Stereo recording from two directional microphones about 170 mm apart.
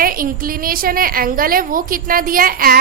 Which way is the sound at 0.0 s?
55° right (ahead or behind).